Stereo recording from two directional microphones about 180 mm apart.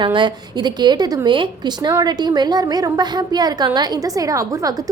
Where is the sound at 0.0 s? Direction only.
25° right (ahead or behind).